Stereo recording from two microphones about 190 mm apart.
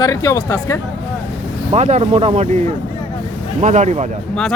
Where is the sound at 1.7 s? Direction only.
35° right (ahead or behind).